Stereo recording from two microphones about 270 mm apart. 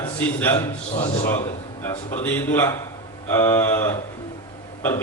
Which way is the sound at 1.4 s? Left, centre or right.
Centre.